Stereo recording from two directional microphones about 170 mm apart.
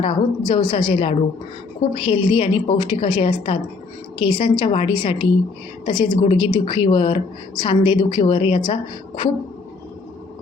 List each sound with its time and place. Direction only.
0.0 s a woman's voice: 30° left (ahead or behind)